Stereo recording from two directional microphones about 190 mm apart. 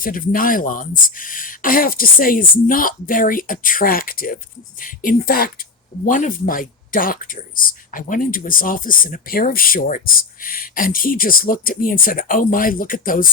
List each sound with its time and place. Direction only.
0.0 s speech: 50° left (ahead or behind)